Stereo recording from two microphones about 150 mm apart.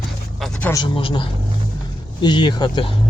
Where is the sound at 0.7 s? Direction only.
30° left (ahead or behind).